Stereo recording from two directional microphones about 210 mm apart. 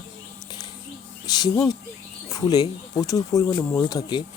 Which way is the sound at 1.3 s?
20° left (ahead or behind).